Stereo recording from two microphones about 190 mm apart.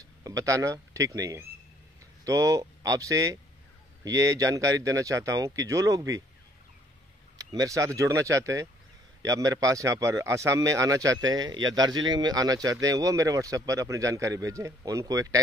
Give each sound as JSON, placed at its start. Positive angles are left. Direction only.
{"t": 0.0, "sound": "speech", "side_deg": -15}
{"t": 7.3, "sound": "speech", "side_deg": -20}